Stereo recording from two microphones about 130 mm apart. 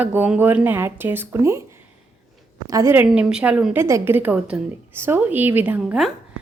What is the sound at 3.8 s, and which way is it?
A woman's voice, 20° right (ahead or behind).